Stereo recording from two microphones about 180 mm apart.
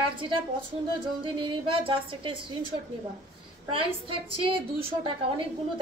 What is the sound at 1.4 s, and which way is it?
Speech, 30° right (ahead or behind).